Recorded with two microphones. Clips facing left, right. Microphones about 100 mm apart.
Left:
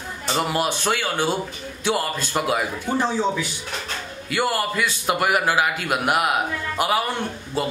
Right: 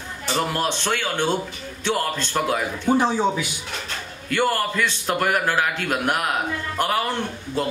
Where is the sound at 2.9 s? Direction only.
15° right (ahead or behind).